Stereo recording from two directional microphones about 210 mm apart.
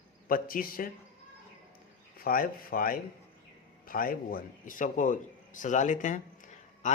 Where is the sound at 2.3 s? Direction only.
45° left (ahead or behind).